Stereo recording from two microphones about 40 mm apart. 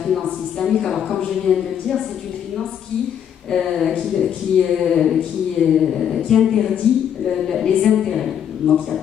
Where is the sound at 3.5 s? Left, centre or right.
Centre.